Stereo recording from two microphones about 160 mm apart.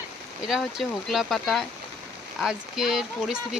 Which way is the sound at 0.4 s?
Centre (ahead or behind).